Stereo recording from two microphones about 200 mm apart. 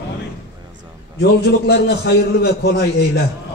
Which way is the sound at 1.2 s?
55° left (ahead or behind).